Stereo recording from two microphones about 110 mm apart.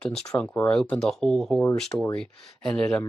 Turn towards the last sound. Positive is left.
turn(degrees=10)  # may be behind; listen again after turning